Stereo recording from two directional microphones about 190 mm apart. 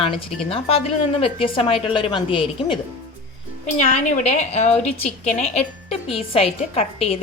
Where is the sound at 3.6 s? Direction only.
40° left (ahead or behind).